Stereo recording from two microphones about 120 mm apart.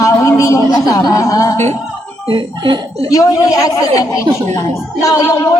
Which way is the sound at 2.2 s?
45° right (ahead or behind).